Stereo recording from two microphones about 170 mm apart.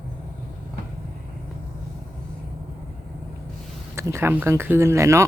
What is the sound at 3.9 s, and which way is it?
Speech, 15° right (ahead or behind).